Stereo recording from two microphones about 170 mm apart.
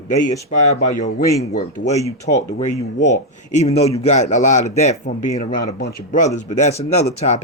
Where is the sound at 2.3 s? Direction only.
40° left (ahead or behind).